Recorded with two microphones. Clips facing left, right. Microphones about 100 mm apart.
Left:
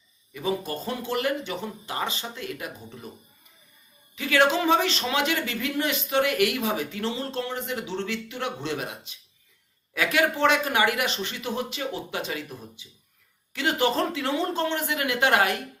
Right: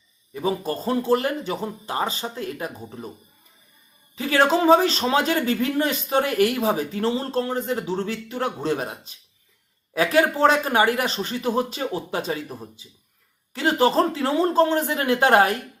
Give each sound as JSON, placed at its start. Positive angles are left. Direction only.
{"t": 0.3, "sound": "speech", "side_deg": -35}
{"t": 4.1, "sound": "speech", "side_deg": -35}